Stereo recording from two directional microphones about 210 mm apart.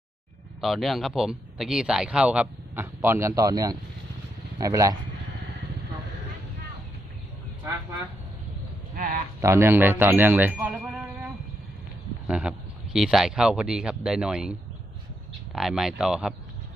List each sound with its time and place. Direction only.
0.6 s a man's voice: centre (ahead or behind)
9.0 s speech: 40° right (ahead or behind)
9.4 s speech: 15° right (ahead or behind)
12.3 s a man's voice: 5° right (ahead or behind)
15.5 s a man's voice: centre (ahead or behind)